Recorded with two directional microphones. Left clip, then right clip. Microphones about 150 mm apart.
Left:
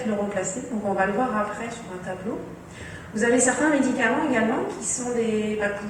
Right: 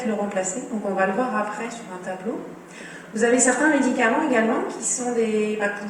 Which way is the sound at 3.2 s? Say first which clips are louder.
Right 2 dB; 40° right (ahead or behind).